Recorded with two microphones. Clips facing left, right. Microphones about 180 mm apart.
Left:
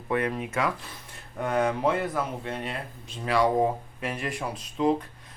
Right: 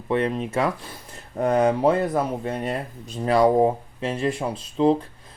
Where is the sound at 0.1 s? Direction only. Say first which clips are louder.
Right 4 dB; 25° right (ahead or behind).